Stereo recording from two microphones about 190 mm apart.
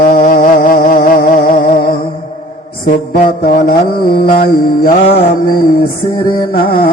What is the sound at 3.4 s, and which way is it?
Music, 50° left (ahead or behind).